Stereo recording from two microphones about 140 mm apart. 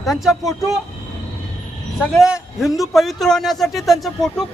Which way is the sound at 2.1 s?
5° right (ahead or behind).